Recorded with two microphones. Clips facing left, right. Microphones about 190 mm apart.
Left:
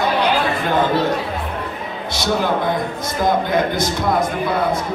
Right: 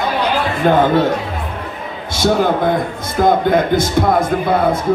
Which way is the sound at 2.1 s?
50° right (ahead or behind).